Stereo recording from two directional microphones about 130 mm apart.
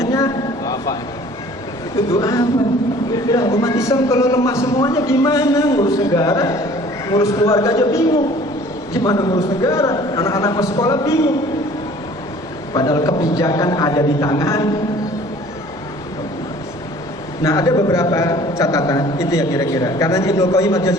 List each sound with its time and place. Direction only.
0.0 s a sound: 25° left (ahead or behind)
2.0 s a man's voice: 25° left (ahead or behind)
12.7 s a man's voice: 30° left (ahead or behind)
17.4 s a man's voice: 25° left (ahead or behind)